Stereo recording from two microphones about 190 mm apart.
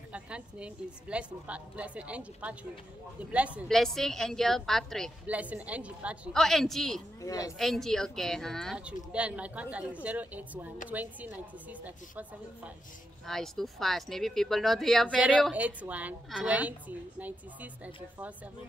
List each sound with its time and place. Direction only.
0.1 s a woman's voice: 5° right (ahead or behind)
7.2 s a woman's voice: 15° left (ahead or behind)
7.5 s a woman's voice: centre (ahead or behind)